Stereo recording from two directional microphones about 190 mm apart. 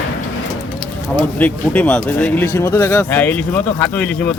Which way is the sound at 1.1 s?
5° left (ahead or behind).